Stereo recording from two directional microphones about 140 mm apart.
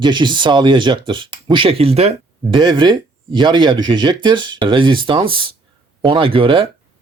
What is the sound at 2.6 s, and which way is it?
Speech, 30° right (ahead or behind).